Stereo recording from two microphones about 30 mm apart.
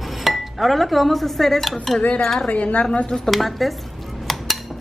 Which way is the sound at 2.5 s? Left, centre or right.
Left.